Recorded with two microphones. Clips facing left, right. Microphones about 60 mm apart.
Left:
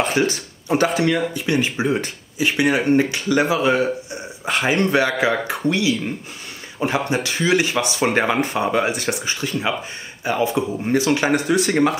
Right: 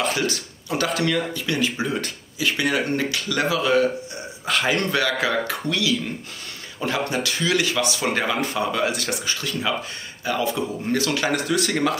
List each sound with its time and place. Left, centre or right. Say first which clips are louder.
0.0 s speech: left 4 dB; left
8.8 s speech: left 2 dB; left